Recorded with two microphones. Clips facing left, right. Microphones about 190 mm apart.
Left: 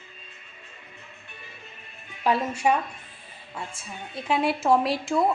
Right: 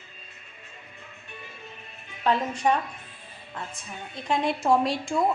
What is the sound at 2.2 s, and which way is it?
A woman's voice, 10° left (ahead or behind).